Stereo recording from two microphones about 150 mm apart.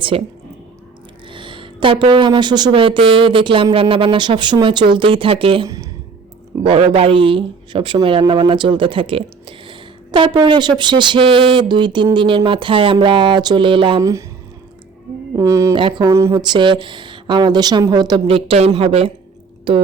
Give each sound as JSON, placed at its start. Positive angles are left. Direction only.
{"t": 0.1, "sound": "speech", "side_deg": -40}
{"t": 1.3, "sound": "speech", "side_deg": -35}
{"t": 5.6, "sound": "speech", "side_deg": -20}
{"t": 6.6, "sound": "speech", "side_deg": -40}
{"t": 14.0, "sound": "a woman's voice", "side_deg": -20}
{"t": 15.4, "sound": "a woman's voice", "side_deg": -20}
{"t": 15.7, "sound": "a woman's voice", "side_deg": -35}
{"t": 18.3, "sound": "speech", "side_deg": -40}